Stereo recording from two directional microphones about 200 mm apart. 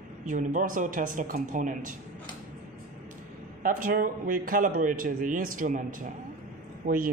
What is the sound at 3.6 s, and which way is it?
Speech, 45° right (ahead or behind).